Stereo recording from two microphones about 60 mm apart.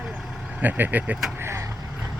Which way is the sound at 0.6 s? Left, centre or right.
Right.